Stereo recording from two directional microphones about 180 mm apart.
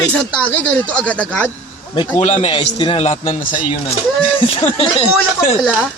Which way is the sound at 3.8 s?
25° left (ahead or behind).